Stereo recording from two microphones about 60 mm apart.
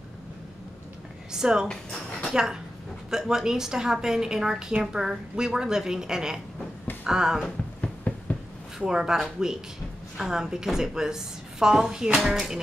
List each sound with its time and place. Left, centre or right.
1.3 s a woman's voice: centre
7.8 s a sound: left
8.7 s a woman's voice: centre